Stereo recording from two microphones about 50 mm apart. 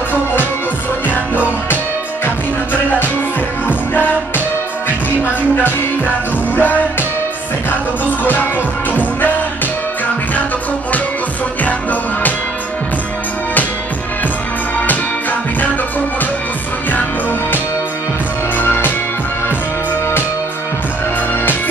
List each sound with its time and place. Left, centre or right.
1.0 s music: left
3.6 s music: left
6.5 s music: left
8.2 s music: left
11.6 s music: left
18.6 s music: left